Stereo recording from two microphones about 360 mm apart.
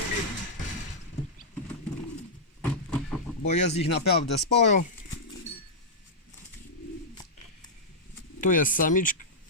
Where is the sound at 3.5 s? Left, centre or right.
Centre.